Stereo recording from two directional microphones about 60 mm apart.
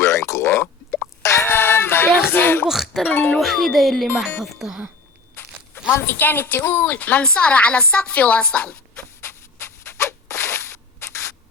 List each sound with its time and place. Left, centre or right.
0.0 s a sound: left
1.2 s plop: left
1.5 s music: left
2.6 s speech: centre
3.1 s speech: left
3.3 s music: centre
5.3 s crunch: left
5.9 s a woman's voice: left
9.2 s a sound: left